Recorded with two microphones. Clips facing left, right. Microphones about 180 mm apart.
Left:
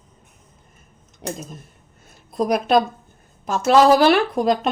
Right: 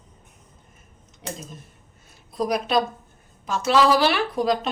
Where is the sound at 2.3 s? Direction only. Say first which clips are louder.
Left 5 dB; 50° left (ahead or behind).